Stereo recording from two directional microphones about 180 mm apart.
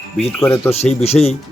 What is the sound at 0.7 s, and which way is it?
Speech, 35° left (ahead or behind).